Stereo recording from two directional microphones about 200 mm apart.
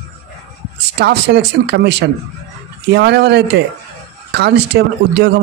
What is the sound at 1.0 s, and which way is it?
Speech, 55° right (ahead or behind).